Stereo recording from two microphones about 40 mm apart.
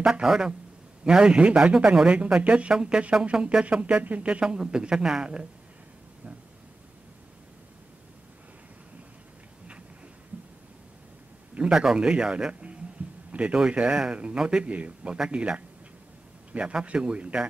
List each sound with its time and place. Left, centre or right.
0.0 s a man's voice: centre
2.7 s a man's voice: right
4.0 s speech: right
4.3 s a man's voice: right
11.5 s a man's voice: right